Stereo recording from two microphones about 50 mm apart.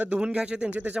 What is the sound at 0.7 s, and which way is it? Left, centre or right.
Speech, right.